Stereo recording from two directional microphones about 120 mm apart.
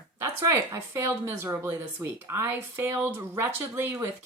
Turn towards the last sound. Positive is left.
turn(degrees=-20)  # may be behind; listen again after turning